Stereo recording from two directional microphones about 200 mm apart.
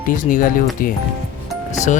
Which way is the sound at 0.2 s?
45° left (ahead or behind).